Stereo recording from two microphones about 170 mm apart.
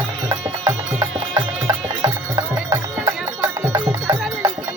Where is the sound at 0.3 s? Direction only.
25° right (ahead or behind).